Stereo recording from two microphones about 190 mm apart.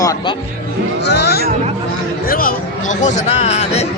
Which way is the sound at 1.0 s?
60° left (ahead or behind).